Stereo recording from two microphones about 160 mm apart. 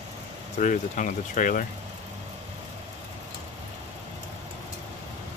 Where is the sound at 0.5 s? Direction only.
50° left (ahead or behind).